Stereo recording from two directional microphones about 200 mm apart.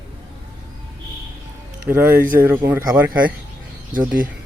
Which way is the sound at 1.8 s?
10° right (ahead or behind).